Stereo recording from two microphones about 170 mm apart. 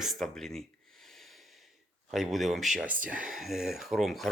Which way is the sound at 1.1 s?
Centre (ahead or behind).